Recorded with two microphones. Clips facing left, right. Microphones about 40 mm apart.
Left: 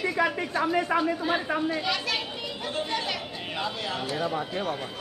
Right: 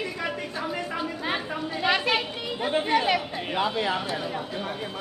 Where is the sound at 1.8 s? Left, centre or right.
Right.